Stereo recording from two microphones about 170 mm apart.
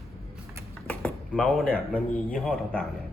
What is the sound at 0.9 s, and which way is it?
Speech, 5° left (ahead or behind).